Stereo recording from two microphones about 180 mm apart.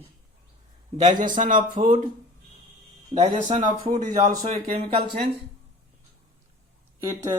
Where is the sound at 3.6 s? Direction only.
25° right (ahead or behind).